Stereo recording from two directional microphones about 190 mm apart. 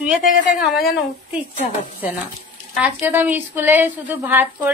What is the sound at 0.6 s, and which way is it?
Speech, 5° right (ahead or behind).